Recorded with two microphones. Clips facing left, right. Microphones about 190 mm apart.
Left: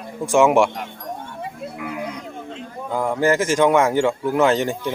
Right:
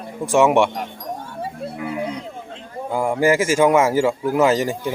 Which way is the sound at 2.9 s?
10° right (ahead or behind).